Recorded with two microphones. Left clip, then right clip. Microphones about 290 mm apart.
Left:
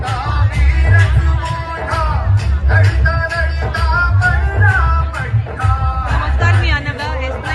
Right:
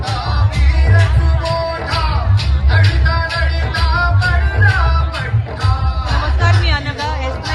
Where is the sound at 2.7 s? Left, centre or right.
Left.